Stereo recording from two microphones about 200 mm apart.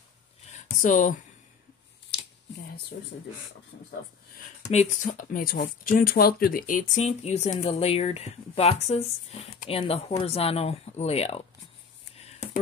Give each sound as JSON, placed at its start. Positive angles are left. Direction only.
{"t": 0.5, "sound": "a sound", "side_deg": 40}
{"t": 2.9, "sound": "speech", "side_deg": 50}
{"t": 4.6, "sound": "speech", "side_deg": 35}